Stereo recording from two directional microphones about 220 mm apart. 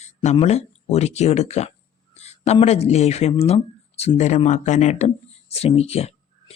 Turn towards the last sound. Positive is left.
turn(degrees=30)  # may be behind; listen again after turning